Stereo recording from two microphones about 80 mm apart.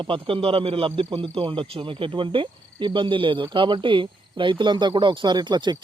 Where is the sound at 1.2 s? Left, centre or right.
Right.